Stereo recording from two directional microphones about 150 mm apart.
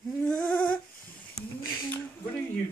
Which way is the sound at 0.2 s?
5° left (ahead or behind).